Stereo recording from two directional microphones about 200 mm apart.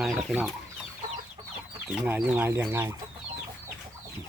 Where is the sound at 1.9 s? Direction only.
5° right (ahead or behind).